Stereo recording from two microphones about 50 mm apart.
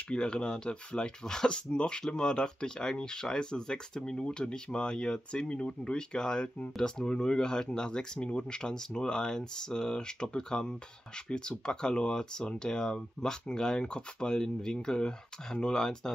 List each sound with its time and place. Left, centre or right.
0.1 s speech: centre